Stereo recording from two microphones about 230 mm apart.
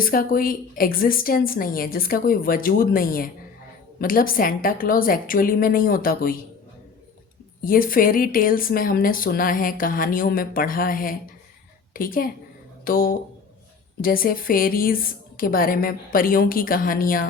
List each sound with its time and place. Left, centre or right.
0.0 s speech: left
7.6 s speech: left